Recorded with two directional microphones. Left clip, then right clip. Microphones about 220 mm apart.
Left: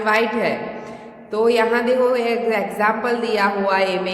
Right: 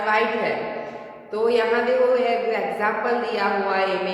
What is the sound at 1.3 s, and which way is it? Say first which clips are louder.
A woman's voice: left 3 dB; 50° left (ahead or behind).